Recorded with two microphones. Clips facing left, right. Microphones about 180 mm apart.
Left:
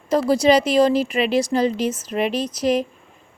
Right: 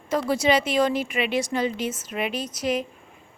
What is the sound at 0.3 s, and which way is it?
A woman's voice, 35° left (ahead or behind).